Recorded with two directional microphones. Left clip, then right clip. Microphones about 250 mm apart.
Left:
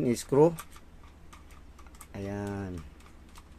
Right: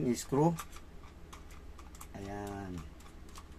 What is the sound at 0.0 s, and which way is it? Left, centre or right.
Speech, left.